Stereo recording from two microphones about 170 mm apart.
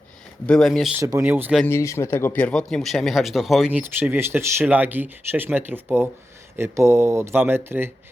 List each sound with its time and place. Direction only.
0.4 s speech: centre (ahead or behind)
0.9 s speech: 20° right (ahead or behind)
1.6 s speech: 15° left (ahead or behind); by 7.9 s 15° right (ahead or behind)